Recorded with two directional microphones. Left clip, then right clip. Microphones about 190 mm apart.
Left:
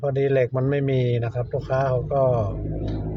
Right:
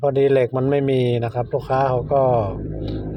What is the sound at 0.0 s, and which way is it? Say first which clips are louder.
Speech: right 5 dB; 15° right (ahead or behind).